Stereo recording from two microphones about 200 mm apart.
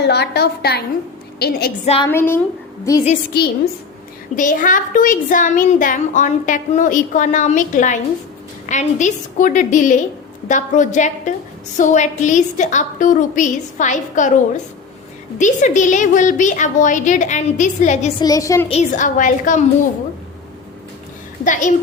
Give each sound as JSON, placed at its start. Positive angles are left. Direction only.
{"t": 0.0, "sound": "a woman's voice", "side_deg": 55}
{"t": 1.8, "sound": "a child's voice", "side_deg": 30}
{"t": 2.0, "sound": "speech", "side_deg": 10}
{"t": 3.3, "sound": "a woman's voice", "side_deg": 50}
{"t": 4.4, "sound": "a child's voice", "side_deg": 40}
{"t": 18.2, "sound": "speech", "side_deg": 15}
{"t": 18.7, "sound": "a child's voice", "side_deg": 35}
{"t": 21.4, "sound": "a child's voice", "side_deg": 40}